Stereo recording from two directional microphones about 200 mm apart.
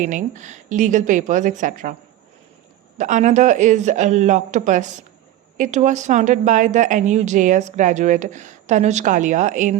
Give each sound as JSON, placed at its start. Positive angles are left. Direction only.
{"t": 0.0, "sound": "a woman's voice", "side_deg": -40}
{"t": 3.0, "sound": "a woman's voice", "side_deg": -40}